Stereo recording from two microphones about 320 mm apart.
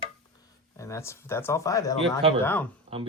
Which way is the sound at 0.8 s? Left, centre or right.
Centre.